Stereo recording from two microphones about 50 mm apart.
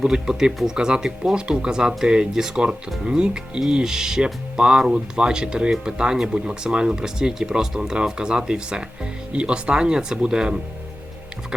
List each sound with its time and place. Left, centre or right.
0.0 s speech: centre